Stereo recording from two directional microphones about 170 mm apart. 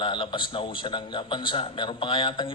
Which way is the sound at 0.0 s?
30° left (ahead or behind).